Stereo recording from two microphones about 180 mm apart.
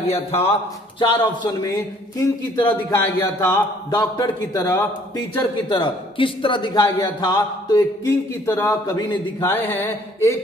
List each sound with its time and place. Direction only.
0.4 s a man's voice: 30° left (ahead or behind); by 10.3 s 10° left (ahead or behind)